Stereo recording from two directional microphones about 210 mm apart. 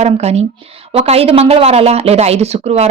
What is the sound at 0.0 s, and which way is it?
A woman's voice, 30° right (ahead or behind).